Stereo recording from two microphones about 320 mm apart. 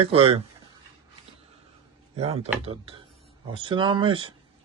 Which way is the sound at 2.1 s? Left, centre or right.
Centre.